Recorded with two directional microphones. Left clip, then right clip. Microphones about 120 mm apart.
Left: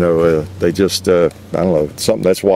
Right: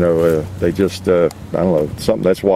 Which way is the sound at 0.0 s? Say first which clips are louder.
Left 1 dB; 45° left (ahead or behind).